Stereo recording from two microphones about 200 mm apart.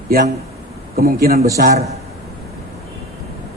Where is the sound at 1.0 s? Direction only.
50° right (ahead or behind).